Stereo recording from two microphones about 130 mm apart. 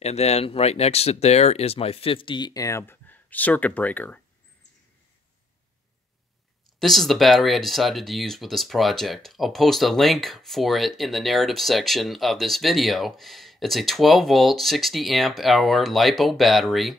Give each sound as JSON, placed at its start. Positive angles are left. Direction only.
{"t": 0.0, "sound": "speech", "side_deg": 55}
{"t": 6.8, "sound": "speech", "side_deg": 0}